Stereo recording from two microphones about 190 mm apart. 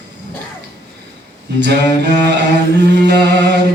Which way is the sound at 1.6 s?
65° right (ahead or behind).